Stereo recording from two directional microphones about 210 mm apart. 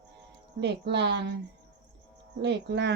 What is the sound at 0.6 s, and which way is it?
Speech, 55° right (ahead or behind).